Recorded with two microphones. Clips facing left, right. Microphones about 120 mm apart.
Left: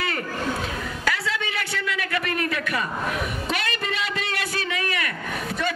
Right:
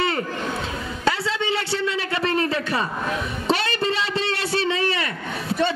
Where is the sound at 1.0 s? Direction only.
25° right (ahead or behind).